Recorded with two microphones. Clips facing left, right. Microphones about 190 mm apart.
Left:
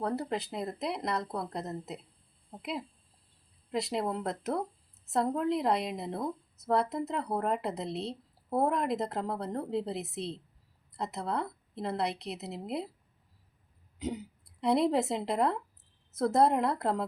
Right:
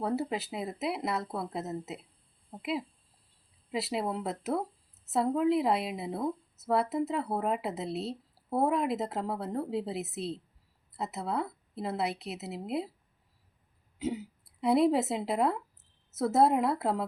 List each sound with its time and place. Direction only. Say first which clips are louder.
0.0 s a woman's voice: right 1 dB; 5° right (ahead or behind)
14.0 s a woman's voice: right 2 dB; centre (ahead or behind)